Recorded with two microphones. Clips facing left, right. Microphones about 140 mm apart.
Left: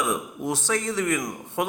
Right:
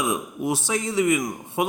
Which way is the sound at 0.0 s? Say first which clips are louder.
Right 2 dB; 10° right (ahead or behind).